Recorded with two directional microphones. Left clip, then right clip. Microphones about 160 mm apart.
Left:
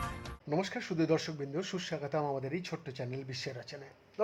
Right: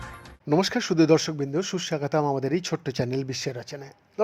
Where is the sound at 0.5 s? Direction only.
50° right (ahead or behind).